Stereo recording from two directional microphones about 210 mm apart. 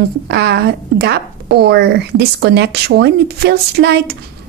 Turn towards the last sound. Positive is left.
turn(degrees=-50)  # may be behind; listen again after turning